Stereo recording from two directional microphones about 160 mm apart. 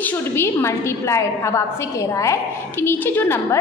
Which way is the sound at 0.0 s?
15° left (ahead or behind).